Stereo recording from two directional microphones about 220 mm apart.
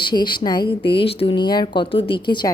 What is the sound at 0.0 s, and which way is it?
A woman's voice, 20° left (ahead or behind).